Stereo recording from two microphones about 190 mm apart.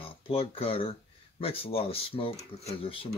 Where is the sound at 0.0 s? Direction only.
30° left (ahead or behind).